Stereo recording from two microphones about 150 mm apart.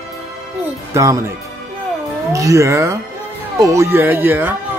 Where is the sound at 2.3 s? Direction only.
20° right (ahead or behind).